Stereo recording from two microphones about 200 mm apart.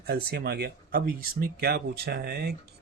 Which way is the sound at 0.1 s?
55° right (ahead or behind).